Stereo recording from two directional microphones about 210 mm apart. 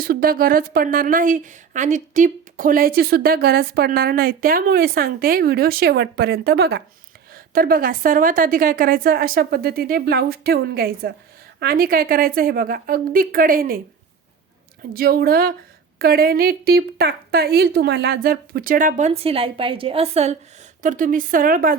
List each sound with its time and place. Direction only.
0.0 s speech: 45° right (ahead or behind)
14.9 s a woman's voice: 45° right (ahead or behind)